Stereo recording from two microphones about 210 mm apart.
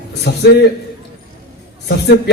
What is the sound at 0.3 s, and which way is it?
Speech, 55° left (ahead or behind).